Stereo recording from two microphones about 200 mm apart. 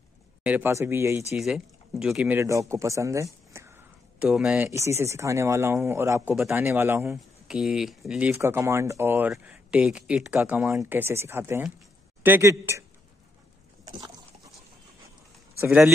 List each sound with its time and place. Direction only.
0.4 s speech: 10° right (ahead or behind)
1.3 s speech: centre (ahead or behind)
2.7 s a sound: 15° right (ahead or behind)
4.6 s speech: 15° right (ahead or behind)
13.8 s a sound: 20° right (ahead or behind)
15.6 s speech: 5° right (ahead or behind)